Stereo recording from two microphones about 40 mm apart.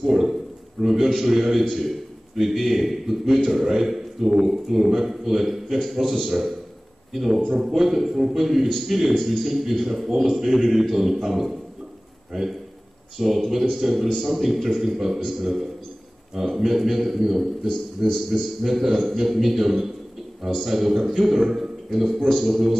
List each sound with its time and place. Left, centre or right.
0.0 s a sound: centre
1.2 s a man's voice: centre
16.3 s a man's voice: centre
17.6 s a man's voice: centre